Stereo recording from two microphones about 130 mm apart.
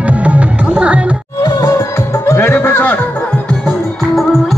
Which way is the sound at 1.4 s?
25° left (ahead or behind).